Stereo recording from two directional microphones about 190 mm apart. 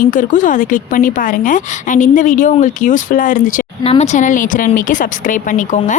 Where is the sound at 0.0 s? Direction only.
45° left (ahead or behind).